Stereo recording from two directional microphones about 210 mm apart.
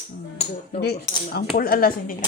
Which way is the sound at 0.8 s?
50° left (ahead or behind).